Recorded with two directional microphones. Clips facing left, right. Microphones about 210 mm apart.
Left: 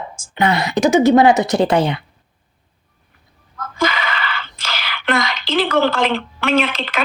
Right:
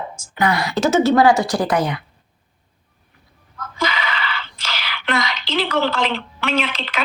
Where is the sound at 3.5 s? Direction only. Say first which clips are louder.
Left 4 dB; 50° left (ahead or behind).